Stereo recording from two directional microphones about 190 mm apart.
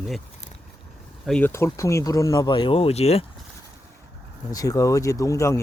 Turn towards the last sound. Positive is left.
turn(degrees=15)  # may be behind; listen again after turning